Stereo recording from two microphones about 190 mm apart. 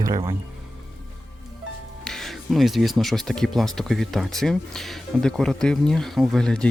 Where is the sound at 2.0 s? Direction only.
Centre (ahead or behind).